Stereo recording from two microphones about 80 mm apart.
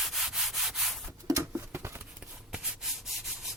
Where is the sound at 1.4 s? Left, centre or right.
Right.